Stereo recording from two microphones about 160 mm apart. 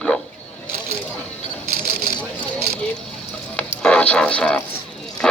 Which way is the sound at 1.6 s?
65° right (ahead or behind).